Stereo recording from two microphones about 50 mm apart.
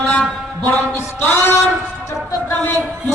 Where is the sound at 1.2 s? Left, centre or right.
Left.